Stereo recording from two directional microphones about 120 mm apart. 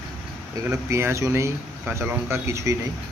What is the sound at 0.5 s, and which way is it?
Speech, 25° right (ahead or behind).